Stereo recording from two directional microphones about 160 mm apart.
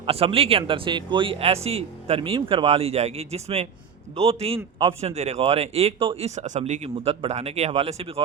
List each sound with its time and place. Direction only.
0.0 s speech: 35° right (ahead or behind)